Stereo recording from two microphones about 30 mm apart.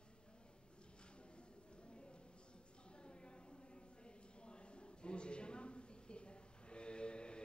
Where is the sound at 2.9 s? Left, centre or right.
Left.